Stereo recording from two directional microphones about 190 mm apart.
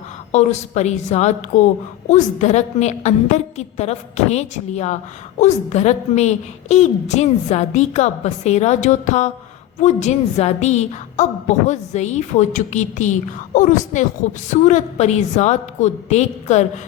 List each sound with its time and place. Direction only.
0.3 s a woman's voice: 35° left (ahead or behind)